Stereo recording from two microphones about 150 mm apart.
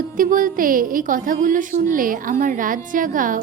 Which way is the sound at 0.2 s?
65° right (ahead or behind).